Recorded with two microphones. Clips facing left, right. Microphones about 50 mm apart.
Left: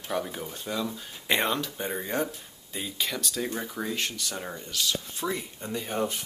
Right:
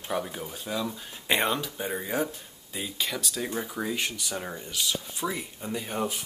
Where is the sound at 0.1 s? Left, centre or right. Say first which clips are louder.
Even; centre.